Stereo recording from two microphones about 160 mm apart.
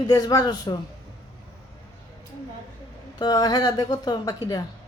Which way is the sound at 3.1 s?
25° left (ahead or behind).